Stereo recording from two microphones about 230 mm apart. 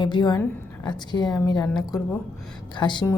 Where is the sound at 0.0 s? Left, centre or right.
Centre.